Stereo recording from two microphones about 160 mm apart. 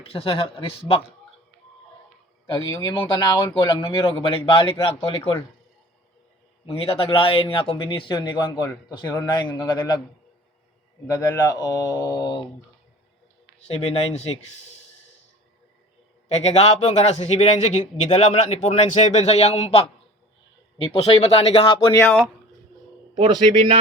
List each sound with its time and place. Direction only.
0.0 s a man's voice: 35° left (ahead or behind)
2.5 s mantra: 20° left (ahead or behind)
4.2 s a man's voice: 35° left (ahead or behind)
6.7 s a man's voice: 35° left (ahead or behind)
8.9 s mantra: 25° left (ahead or behind)
11.1 s mantra: 20° left (ahead or behind)
13.7 s a man's voice: 40° left (ahead or behind)
16.3 s a man's voice: 40° left (ahead or behind)
20.8 s a man's voice: 35° left (ahead or behind)
21.9 s speech: 15° left (ahead or behind)